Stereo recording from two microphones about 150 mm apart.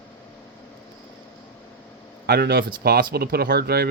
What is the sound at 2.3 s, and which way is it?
Speech, 90° right.